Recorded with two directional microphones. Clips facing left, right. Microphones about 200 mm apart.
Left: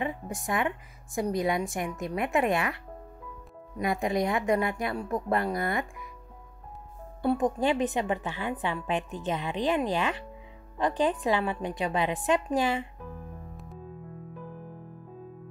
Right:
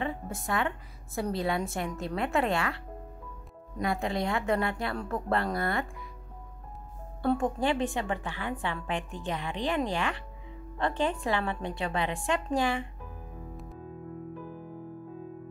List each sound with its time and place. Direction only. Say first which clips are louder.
0.5 s speech: left 1 dB; 15° left (ahead or behind)
3.8 s speech: left 3 dB; 20° left (ahead or behind)
7.2 s a woman's voice: left 2 dB; 20° left (ahead or behind)